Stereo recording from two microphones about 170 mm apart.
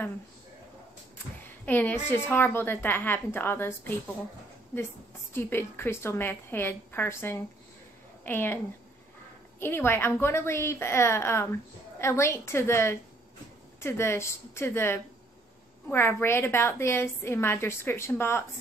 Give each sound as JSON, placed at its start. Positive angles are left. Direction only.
{"t": 1.7, "sound": "a woman's voice", "side_deg": 10}
{"t": 5.3, "sound": "a woman's voice", "side_deg": 15}
{"t": 9.6, "sound": "a woman's voice", "side_deg": 15}